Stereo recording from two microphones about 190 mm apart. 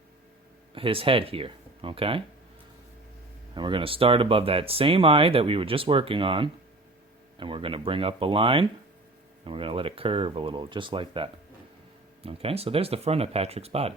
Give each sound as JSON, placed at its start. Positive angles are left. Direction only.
{"t": 0.7, "sound": "speech", "side_deg": -30}
{"t": 3.5, "sound": "speech", "side_deg": -25}